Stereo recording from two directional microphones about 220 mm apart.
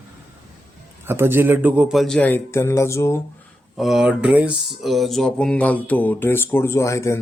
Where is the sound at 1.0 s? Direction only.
10° right (ahead or behind); by 3.2 s 10° left (ahead or behind).